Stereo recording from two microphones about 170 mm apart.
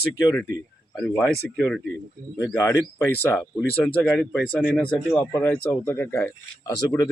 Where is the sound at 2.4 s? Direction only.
20° left (ahead or behind).